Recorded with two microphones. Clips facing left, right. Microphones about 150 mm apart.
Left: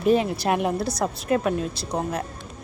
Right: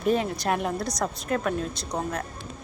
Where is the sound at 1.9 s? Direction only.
15° left (ahead or behind).